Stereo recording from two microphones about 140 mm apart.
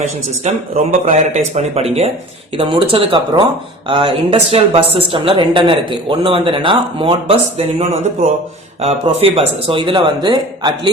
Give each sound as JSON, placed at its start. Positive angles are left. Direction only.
{"t": 0.4, "sound": "speech", "side_deg": -50}